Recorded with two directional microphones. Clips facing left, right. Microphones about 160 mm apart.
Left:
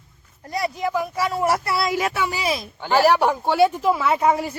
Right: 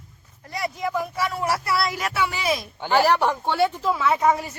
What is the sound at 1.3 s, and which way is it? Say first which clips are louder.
Speech: left 4 dB; 35° left (ahead or behind).